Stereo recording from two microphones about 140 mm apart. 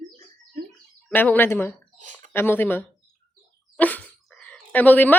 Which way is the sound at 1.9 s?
60° right (ahead or behind).